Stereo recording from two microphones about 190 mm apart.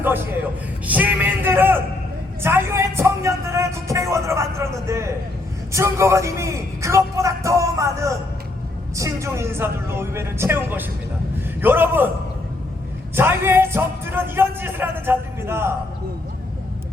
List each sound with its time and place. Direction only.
0.9 s music: 10° right (ahead or behind)
2.4 s a sound: 10° right (ahead or behind)
5.7 s a man's voice: 15° right (ahead or behind)
13.1 s speech: 10° right (ahead or behind)